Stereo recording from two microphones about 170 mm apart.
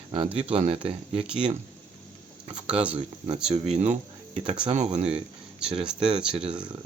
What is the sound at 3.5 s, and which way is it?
Speech, 40° right (ahead or behind).